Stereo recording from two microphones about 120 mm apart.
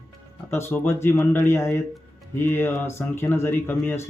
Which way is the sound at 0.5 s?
20° left (ahead or behind).